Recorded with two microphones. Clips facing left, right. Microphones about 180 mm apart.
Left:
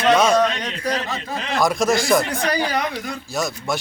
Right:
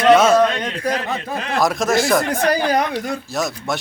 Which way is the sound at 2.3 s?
45° right (ahead or behind).